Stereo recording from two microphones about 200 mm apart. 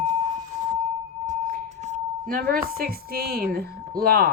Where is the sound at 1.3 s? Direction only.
35° right (ahead or behind).